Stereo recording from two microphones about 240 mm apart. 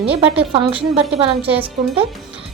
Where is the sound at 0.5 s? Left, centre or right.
Right.